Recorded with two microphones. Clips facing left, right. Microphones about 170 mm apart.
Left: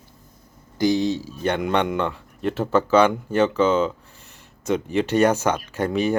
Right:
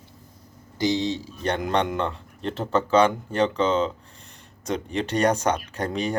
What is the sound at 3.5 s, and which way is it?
Speech, 5° left (ahead or behind).